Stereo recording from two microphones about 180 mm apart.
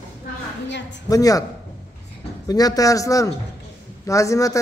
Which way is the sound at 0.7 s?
80° left.